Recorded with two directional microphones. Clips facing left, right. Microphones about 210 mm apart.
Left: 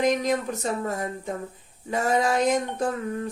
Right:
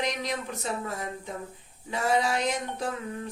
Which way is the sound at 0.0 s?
45° left (ahead or behind).